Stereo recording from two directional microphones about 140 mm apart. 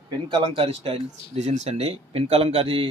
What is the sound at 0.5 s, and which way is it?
Speech, 45° right (ahead or behind).